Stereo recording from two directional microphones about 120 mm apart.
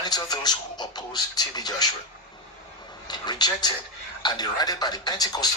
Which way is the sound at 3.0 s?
35° left (ahead or behind).